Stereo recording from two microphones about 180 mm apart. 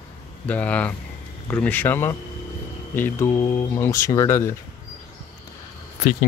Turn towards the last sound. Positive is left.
turn(degrees=50)  # may be behind; listen again after turning